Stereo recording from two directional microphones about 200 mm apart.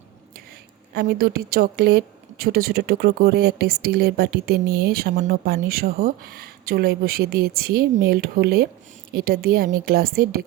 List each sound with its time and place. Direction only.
0.9 s a woman's voice: 50° right (ahead or behind)